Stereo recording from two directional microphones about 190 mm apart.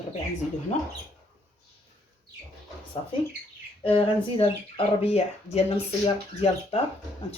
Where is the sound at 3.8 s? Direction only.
30° left (ahead or behind).